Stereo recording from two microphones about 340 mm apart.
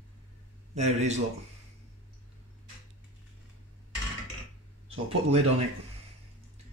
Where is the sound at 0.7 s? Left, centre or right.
Centre.